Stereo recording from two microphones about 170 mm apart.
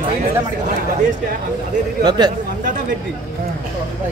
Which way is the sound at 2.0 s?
25° right (ahead or behind).